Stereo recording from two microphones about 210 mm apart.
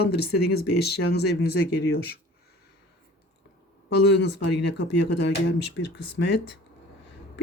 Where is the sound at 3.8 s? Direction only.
55° left (ahead or behind).